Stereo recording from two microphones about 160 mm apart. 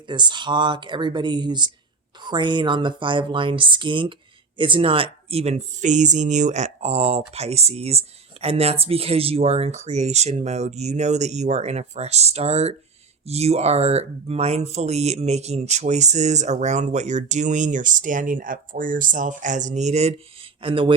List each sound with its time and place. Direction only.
0.1 s speech: 30° right (ahead or behind); by 20.1 s 45° right (ahead or behind)
20.6 s speech: 35° right (ahead or behind)